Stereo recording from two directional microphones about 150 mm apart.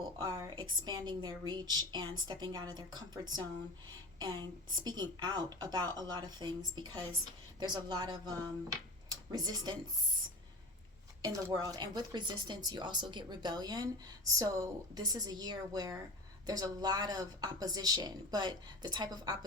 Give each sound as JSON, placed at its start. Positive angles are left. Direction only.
{"t": 0.2, "sound": "speech", "side_deg": -25}
{"t": 11.2, "sound": "speech", "side_deg": -20}